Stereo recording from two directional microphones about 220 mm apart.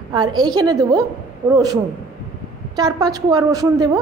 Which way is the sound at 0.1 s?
20° right (ahead or behind).